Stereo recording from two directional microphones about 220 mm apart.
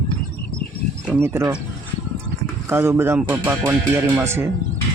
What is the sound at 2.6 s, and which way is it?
Speech, 10° right (ahead or behind).